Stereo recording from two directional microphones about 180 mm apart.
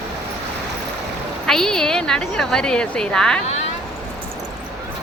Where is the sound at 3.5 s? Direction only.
35° left (ahead or behind).